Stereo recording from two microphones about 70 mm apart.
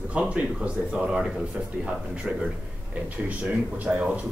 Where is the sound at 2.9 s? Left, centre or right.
Right.